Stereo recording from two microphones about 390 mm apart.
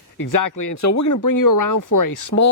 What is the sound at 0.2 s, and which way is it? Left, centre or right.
Speech, left.